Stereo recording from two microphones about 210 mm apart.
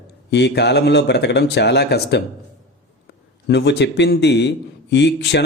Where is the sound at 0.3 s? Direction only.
55° left (ahead or behind).